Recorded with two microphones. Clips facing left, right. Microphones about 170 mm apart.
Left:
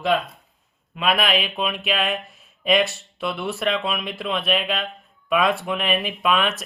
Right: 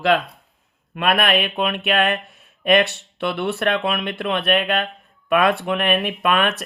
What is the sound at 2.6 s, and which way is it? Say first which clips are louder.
Speech: right 3 dB; 60° right (ahead or behind).